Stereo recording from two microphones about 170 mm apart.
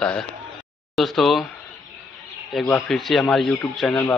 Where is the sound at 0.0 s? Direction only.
5° left (ahead or behind).